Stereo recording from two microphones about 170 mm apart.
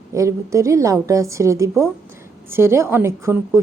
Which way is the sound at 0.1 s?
20° right (ahead or behind).